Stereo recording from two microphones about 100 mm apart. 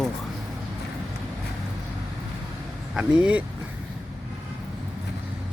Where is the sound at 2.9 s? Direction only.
10° right (ahead or behind).